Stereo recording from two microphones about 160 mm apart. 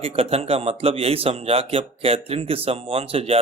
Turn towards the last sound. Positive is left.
turn(degrees=-35)  # may be behind; listen again after turning